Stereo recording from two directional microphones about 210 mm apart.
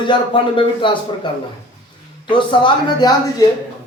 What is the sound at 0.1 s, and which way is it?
Speech, 25° left (ahead or behind).